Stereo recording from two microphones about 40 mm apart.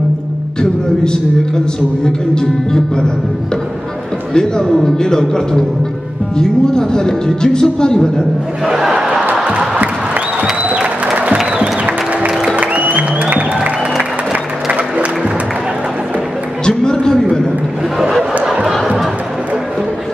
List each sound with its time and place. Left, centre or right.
0.6 s speech: centre
4.3 s a man's voice: centre
4.6 s speech: centre
8.6 s battle cry: centre
9.3 s music: right
11.5 s music: right
14.3 s applause: right
16.6 s a sound: centre